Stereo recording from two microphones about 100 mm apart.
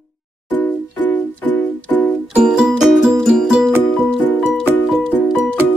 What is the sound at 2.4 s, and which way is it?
Music, 5° right (ahead or behind).